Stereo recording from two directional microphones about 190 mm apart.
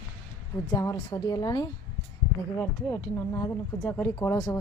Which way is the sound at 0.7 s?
20° left (ahead or behind).